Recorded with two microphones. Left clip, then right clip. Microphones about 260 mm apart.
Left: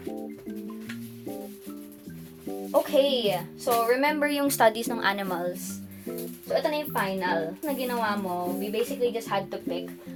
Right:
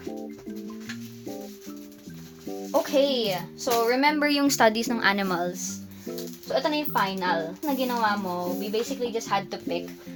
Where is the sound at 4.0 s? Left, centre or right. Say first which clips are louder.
Right 2 dB; right.